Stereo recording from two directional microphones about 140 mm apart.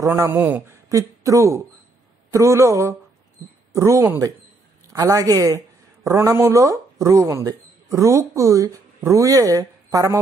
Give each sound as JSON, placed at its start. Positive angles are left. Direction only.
{"t": 0.1, "sound": "speech", "side_deg": -15}
{"t": 0.8, "sound": "speech", "side_deg": -25}